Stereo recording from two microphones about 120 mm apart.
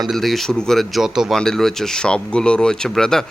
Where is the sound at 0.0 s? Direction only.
Centre (ahead or behind).